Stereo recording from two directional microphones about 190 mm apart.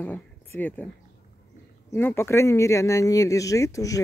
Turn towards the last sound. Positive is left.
turn(degrees=15)  # may be behind; listen again after turning